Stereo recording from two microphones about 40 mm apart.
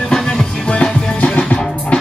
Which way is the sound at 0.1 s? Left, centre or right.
Centre.